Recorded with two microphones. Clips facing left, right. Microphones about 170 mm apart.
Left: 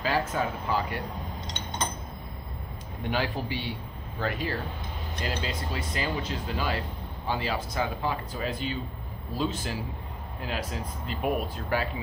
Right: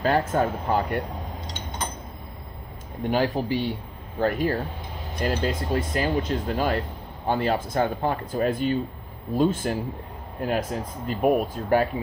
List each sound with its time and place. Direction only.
0.0 s speech: 50° right (ahead or behind)
3.0 s a man's voice: 40° right (ahead or behind)